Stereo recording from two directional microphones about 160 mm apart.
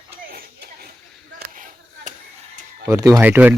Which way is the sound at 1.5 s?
55° right (ahead or behind).